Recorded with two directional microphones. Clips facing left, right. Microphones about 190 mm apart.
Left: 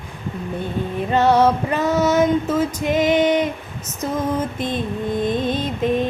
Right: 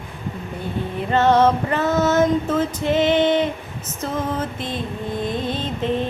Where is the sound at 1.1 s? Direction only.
10° left (ahead or behind).